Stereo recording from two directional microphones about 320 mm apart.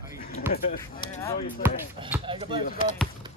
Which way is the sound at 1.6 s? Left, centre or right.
Centre.